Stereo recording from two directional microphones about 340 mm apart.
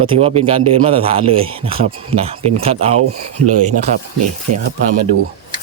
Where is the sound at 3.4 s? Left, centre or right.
Right.